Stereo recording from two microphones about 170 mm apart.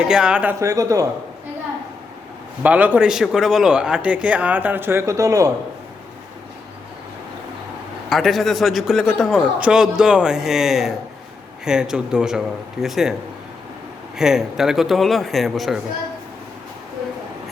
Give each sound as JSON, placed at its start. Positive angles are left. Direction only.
{"t": 0.0, "sound": "a man's voice", "side_deg": -5}
{"t": 0.6, "sound": "speech", "side_deg": -20}
{"t": 2.6, "sound": "speech", "side_deg": -10}
{"t": 8.1, "sound": "a man's voice", "side_deg": 0}
{"t": 14.2, "sound": "a man's voice", "side_deg": -5}